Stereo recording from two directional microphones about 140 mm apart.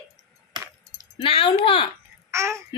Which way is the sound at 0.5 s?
30° right (ahead or behind).